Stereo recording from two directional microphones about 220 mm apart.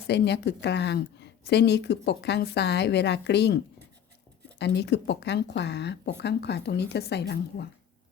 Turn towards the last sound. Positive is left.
turn(degrees=50)  # may be behind; listen again after turning